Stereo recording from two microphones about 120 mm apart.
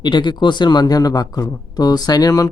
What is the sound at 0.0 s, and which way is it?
Speech, 40° left (ahead or behind).